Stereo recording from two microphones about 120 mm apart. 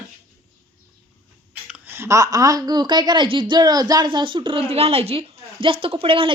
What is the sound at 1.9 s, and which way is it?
A woman's voice, 25° right (ahead or behind).